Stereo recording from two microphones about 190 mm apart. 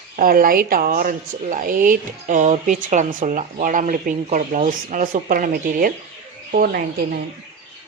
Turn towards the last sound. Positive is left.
turn(degrees=-55)  # may be behind; listen again after turning